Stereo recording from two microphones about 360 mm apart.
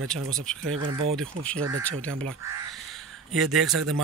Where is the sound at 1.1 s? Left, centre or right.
Centre.